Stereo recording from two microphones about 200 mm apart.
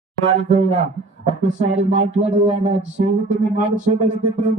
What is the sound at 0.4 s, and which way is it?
Speech, 35° right (ahead or behind).